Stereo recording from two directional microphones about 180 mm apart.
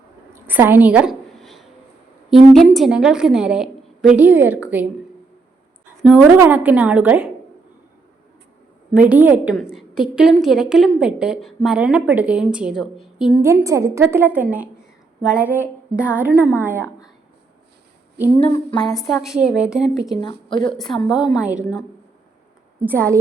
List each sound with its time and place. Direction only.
0.3 s a woman's voice: 10° right (ahead or behind)
1.4 s a sound: centre (ahead or behind)
2.3 s a woman's voice: centre (ahead or behind)
6.0 s a woman's voice: 5° right (ahead or behind)
8.9 s a woman's voice: 10° right (ahead or behind)
13.4 s a woman's voice: 15° right (ahead or behind)
18.4 s a sound: 25° left (ahead or behind)
19.2 s a woman's voice: 5° right (ahead or behind)
20.5 s a sound: 25° left (ahead or behind)
20.7 s a woman's voice: centre (ahead or behind)
22.9 s a woman's voice: 15° right (ahead or behind)